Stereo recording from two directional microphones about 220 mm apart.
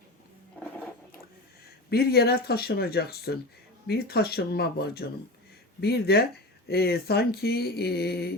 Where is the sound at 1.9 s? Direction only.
45° left (ahead or behind).